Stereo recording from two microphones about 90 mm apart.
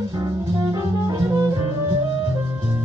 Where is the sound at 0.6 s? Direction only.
45° right (ahead or behind).